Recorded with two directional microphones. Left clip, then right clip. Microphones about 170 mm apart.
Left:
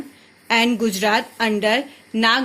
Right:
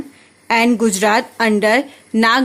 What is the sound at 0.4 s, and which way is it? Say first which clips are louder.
A woman's voice: right 4 dB; 20° right (ahead or behind).